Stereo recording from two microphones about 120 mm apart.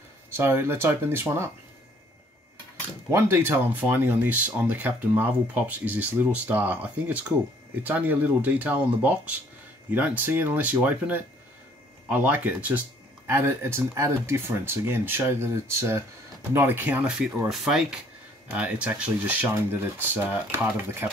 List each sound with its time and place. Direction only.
0.3 s speech: 20° right (ahead or behind)
3.1 s speech: 20° right (ahead or behind)